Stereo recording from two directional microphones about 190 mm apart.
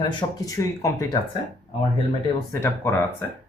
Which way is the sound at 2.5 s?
15° left (ahead or behind).